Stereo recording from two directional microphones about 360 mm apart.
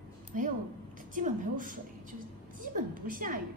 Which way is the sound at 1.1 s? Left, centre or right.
Right.